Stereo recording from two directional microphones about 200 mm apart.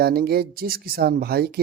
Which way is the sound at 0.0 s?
50° right (ahead or behind).